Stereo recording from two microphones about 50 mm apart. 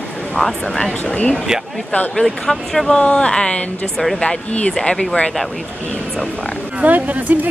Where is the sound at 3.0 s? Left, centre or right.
Centre.